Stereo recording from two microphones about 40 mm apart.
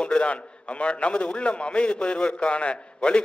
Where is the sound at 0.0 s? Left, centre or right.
Left.